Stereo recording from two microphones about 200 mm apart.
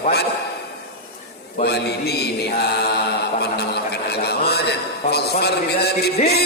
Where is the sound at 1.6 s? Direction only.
55° left (ahead or behind).